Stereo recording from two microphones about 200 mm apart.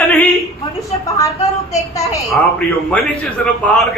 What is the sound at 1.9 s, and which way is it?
A man's voice, 15° left (ahead or behind).